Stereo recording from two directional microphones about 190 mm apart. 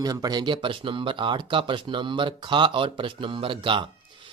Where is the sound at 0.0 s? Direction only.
20° right (ahead or behind).